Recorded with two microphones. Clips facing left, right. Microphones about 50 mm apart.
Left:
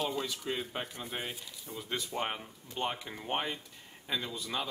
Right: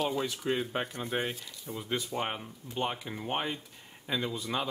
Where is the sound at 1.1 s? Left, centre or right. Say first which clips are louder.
Right 7 dB; right.